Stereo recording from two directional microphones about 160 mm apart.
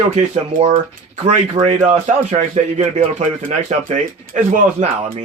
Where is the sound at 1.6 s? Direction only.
45° right (ahead or behind).